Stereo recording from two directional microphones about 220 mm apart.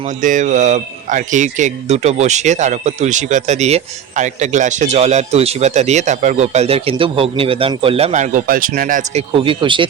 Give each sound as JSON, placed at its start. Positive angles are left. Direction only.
{"t": 0.2, "sound": "speech", "side_deg": -35}